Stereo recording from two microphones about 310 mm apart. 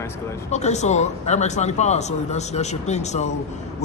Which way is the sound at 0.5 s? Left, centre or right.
Left.